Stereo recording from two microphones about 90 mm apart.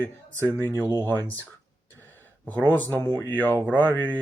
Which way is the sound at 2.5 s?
20° left (ahead or behind).